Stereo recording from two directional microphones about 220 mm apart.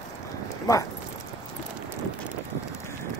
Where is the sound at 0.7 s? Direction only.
15° left (ahead or behind).